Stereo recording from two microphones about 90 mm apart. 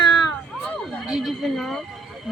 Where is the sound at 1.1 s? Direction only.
Centre (ahead or behind).